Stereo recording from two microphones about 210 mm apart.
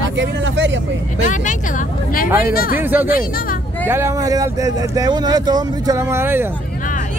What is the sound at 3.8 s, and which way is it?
Speech, 10° right (ahead or behind).